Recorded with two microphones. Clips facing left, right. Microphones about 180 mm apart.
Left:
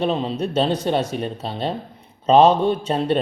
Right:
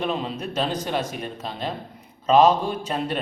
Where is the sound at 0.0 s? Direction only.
30° left (ahead or behind).